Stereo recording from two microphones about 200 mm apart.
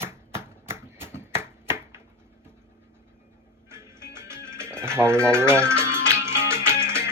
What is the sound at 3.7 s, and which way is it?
Music, 15° right (ahead or behind).